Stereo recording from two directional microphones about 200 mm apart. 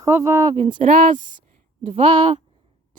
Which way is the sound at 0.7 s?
40° right (ahead or behind).